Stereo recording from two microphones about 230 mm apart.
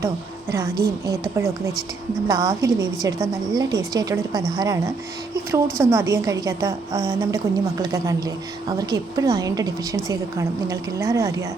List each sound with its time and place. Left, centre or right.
0.5 s a woman's voice: centre
2.2 s a woman's voice: centre